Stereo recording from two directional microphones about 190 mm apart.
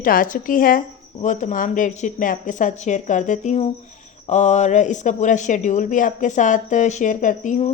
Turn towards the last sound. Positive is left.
turn(degrees=40)  # may be behind; listen again after turning